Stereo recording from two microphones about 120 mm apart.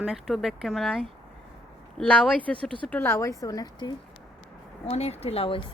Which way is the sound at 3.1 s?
25° left (ahead or behind).